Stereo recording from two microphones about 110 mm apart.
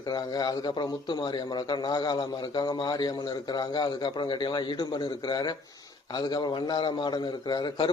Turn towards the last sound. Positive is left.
turn(degrees=40)  # may be behind; listen again after turning